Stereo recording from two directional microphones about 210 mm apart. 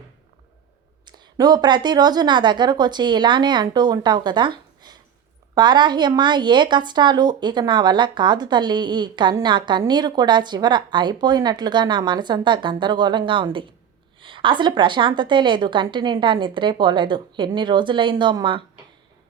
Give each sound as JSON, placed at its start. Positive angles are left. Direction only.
{"t": 1.0, "sound": "a woman's voice", "side_deg": -20}